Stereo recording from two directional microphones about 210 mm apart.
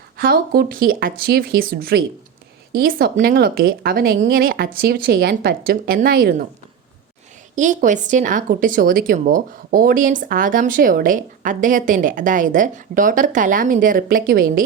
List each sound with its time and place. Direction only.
0.2 s speech: 45° right (ahead or behind)
7.5 s speech: 35° right (ahead or behind)